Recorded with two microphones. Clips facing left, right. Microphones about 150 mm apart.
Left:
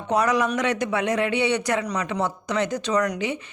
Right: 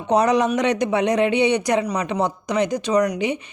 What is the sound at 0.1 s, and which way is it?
A woman's voice, 20° right (ahead or behind).